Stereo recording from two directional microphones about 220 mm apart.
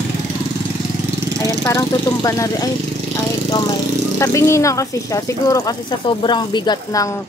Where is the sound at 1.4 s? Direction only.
15° left (ahead or behind).